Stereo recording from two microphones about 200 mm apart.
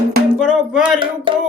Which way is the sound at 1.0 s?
25° right (ahead or behind).